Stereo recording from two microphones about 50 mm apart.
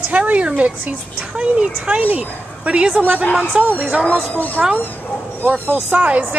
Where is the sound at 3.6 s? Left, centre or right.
Right.